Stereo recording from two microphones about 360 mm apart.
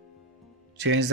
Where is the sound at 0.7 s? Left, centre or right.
Right.